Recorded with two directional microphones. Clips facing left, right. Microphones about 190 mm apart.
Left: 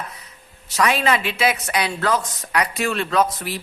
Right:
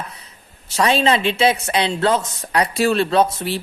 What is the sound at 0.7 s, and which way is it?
A man's voice, 30° right (ahead or behind).